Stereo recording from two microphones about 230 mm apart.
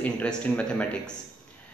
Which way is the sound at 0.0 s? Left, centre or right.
Centre.